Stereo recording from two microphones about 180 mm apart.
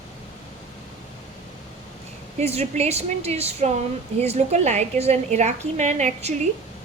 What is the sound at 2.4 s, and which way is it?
A woman's voice, 35° right (ahead or behind).